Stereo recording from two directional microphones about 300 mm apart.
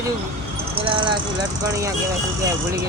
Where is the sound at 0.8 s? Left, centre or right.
Centre.